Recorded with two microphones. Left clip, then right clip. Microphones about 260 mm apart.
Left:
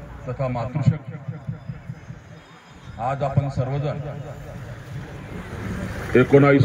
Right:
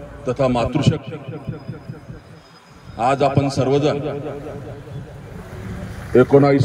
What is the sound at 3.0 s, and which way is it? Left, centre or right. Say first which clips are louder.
A man's voice: right 8 dB; right.